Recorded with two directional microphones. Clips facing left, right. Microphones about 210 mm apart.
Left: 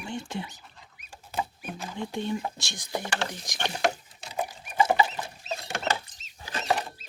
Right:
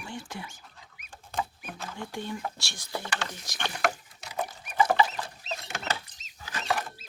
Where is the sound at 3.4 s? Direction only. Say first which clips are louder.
Left 1 dB; 20° left (ahead or behind).